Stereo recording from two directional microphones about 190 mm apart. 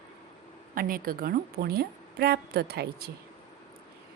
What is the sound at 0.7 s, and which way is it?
A woman's voice, 50° right (ahead or behind).